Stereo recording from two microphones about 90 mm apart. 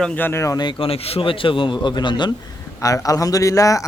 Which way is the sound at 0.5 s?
75° left (ahead or behind).